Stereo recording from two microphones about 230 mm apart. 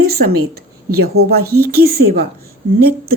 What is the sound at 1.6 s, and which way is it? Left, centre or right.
Speech, right.